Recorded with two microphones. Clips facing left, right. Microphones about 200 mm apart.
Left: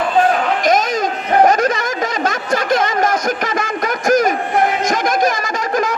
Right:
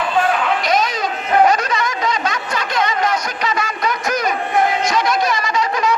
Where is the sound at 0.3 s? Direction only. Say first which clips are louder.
Left 3 dB; 45° left (ahead or behind).